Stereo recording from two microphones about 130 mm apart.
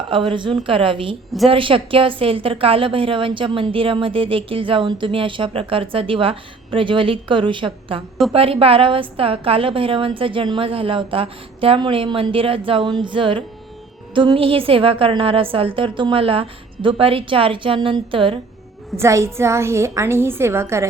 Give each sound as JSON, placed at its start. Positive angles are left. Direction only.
{"t": 0.1, "sound": "a woman's voice", "side_deg": -40}
{"t": 18.9, "sound": "a woman's voice", "side_deg": -20}